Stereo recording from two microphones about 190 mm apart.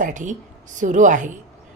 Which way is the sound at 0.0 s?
40° right (ahead or behind).